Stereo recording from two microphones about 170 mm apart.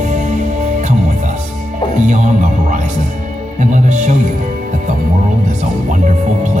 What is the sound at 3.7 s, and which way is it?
Speech, 45° right (ahead or behind).